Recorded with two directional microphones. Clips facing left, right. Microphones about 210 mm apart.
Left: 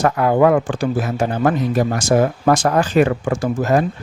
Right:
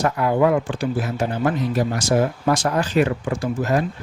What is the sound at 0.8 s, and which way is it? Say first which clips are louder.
Speech: left 3 dB; 45° left (ahead or behind).